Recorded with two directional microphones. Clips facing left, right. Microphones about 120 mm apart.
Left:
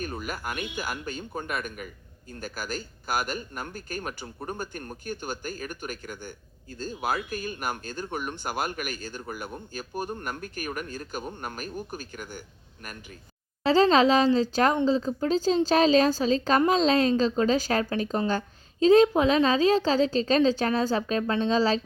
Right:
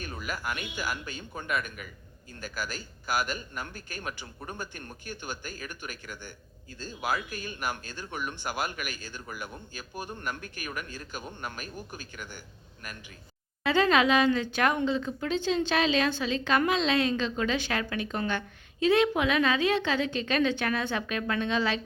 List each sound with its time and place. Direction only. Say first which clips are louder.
0.0 s speech: left 3 dB; 45° left (ahead or behind)
13.7 s a woman's voice: left 4 dB; 30° left (ahead or behind)